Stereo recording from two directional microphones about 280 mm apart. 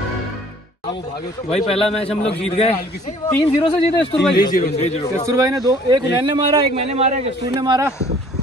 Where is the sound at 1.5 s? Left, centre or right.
Left.